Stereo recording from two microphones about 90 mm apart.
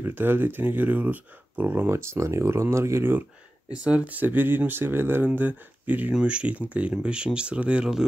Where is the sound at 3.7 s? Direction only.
10° right (ahead or behind).